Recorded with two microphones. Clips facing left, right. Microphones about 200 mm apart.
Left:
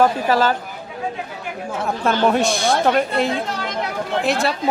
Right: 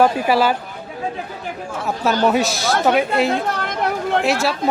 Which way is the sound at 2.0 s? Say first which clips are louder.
Even; centre (ahead or behind).